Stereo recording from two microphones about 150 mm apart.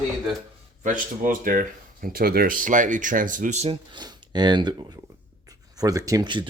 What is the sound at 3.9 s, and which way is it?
Speech, 30° right (ahead or behind).